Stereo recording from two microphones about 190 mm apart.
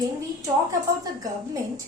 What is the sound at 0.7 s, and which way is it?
Speech, 20° right (ahead or behind).